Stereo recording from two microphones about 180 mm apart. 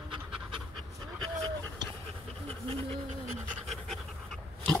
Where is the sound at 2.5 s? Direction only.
30° right (ahead or behind).